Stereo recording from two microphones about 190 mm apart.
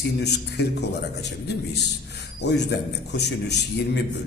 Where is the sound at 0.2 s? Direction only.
60° left (ahead or behind).